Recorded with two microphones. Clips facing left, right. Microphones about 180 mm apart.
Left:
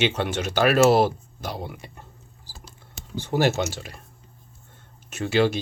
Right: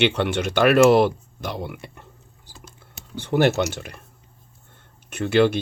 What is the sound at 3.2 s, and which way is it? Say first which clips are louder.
Speech: right 3 dB; 60° right (ahead or behind).